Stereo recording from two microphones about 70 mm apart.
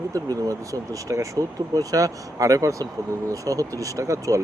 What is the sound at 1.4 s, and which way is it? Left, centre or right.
Speech, right.